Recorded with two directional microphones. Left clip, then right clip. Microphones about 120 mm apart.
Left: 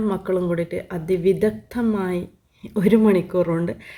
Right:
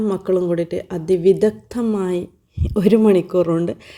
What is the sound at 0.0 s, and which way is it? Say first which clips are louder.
A woman's voice: right 4 dB; 40° right (ahead or behind).